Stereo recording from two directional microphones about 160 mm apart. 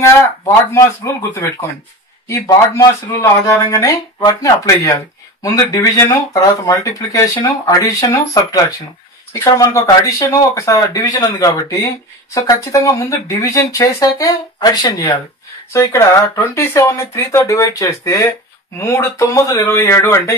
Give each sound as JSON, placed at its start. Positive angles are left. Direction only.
{"t": 0.7, "sound": "speech", "side_deg": 15}